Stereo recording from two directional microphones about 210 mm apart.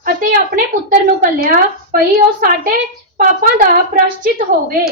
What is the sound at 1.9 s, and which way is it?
Speech, 45° right (ahead or behind).